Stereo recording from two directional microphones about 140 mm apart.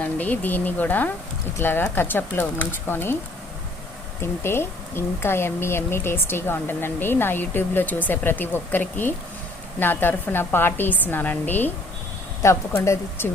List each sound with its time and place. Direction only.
0.0 s speech: 10° left (ahead or behind)
4.2 s a woman's voice: 15° left (ahead or behind)